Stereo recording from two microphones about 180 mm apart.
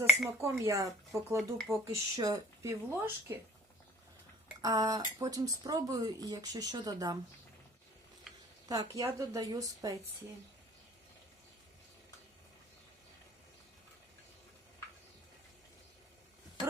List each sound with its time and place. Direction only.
0.4 s speech: 15° right (ahead or behind)
1.4 s speech: centre (ahead or behind)
1.7 s speech: 15° right (ahead or behind)
4.6 s speech: 20° right (ahead or behind)
8.7 s speech: 20° right (ahead or behind)